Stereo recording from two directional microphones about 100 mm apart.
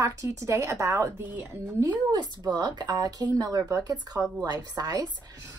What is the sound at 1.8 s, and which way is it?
Speech, 45° right (ahead or behind).